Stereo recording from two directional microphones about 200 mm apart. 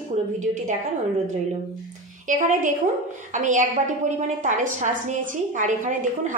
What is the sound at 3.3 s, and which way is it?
A woman's voice, 40° right (ahead or behind).